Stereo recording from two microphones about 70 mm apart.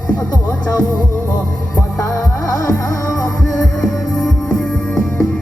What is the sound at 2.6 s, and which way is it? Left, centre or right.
Music, left.